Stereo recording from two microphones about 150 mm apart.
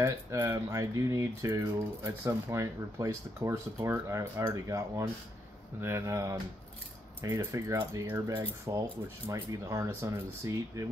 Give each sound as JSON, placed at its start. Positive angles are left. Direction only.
{"t": 0.0, "sound": "speech", "side_deg": -20}